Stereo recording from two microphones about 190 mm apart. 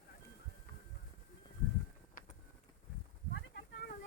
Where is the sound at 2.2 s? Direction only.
45° left (ahead or behind).